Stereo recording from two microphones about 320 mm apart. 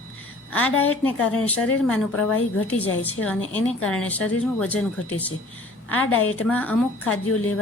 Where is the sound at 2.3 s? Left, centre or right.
Left.